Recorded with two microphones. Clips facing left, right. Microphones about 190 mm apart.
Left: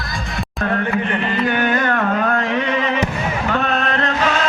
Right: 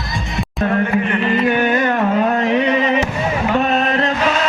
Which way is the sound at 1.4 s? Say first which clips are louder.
Right 1 dB; 25° right (ahead or behind).